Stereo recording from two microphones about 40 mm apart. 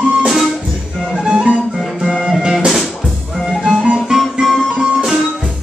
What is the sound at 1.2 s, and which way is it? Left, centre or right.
Music, right.